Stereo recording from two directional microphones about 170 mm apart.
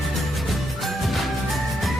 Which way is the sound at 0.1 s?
Centre (ahead or behind).